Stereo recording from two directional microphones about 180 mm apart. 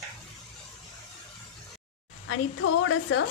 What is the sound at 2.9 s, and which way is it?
Speech, 90° left.